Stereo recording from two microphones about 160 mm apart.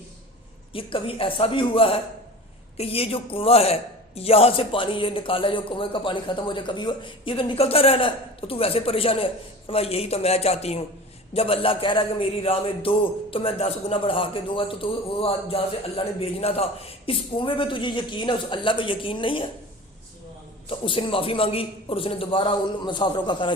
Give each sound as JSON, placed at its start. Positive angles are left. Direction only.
{"t": 0.7, "sound": "a man's voice", "side_deg": 35}
{"t": 20.7, "sound": "a man's voice", "side_deg": 35}